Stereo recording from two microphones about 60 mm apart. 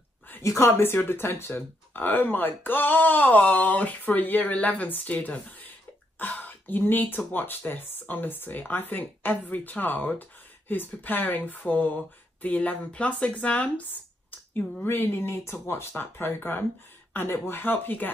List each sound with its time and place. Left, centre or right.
0.4 s speech: left
6.1 s cough: left
6.8 s speech: left
14.9 s speech: left